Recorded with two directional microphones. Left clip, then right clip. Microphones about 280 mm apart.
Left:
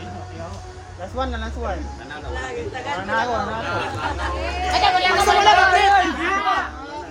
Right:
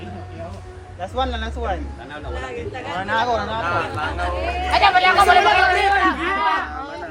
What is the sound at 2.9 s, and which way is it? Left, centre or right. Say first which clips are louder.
Speech: right 2 dB; right.